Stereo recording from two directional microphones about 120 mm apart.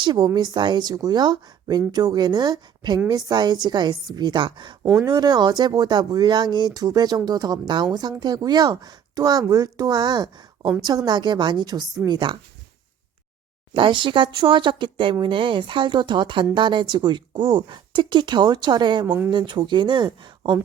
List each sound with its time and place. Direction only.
0.0 s speech: 40° right (ahead or behind)
13.7 s speech: 45° right (ahead or behind)
19.0 s speech: 15° right (ahead or behind)
19.3 s speech: 40° right (ahead or behind)